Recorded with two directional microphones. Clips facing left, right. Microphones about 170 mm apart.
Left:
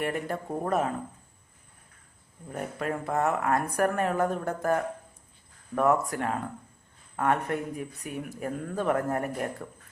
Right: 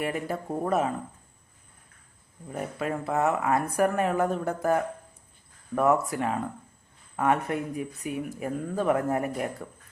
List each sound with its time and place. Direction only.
0.0 s speech: 5° right (ahead or behind)
2.5 s speech: 5° right (ahead or behind)